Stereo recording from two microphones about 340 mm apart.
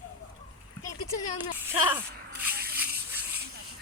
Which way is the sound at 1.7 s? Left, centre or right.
Centre.